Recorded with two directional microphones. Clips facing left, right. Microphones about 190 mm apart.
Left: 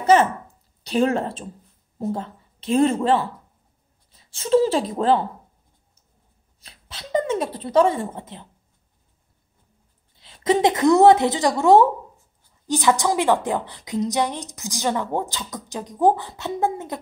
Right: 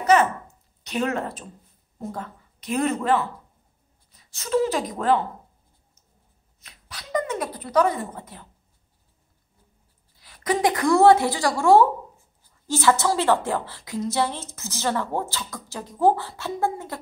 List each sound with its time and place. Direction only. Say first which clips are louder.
0.0 s a sound: left 2 dB; 30° left (ahead or behind)
0.8 s a woman's voice: left 5 dB; 30° left (ahead or behind)
6.6 s speech: left 3 dB; 30° left (ahead or behind)
10.1 s a woman's voice: left 5 dB; 25° left (ahead or behind)